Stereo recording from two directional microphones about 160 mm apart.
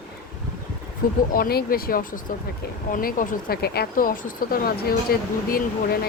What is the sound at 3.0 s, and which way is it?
Speech, 70° left (ahead or behind).